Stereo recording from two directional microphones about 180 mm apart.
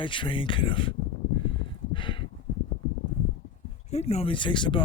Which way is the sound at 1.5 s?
25° left (ahead or behind).